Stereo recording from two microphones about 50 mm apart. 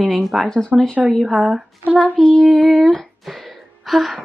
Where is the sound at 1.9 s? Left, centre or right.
Right.